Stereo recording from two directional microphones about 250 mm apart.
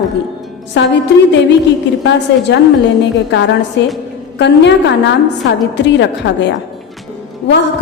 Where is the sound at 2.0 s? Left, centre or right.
Left.